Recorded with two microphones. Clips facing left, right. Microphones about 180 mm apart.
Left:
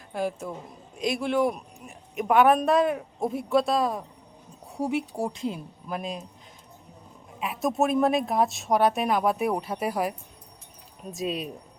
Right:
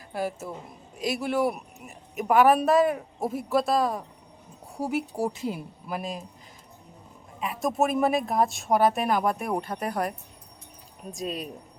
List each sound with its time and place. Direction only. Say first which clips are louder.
0.1 s a woman's voice: left 1 dB; 5° right (ahead or behind)
7.3 s a woman's voice: even; centre (ahead or behind)